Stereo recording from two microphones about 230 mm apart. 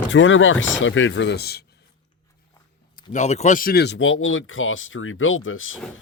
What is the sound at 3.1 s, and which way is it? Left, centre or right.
Speech, left.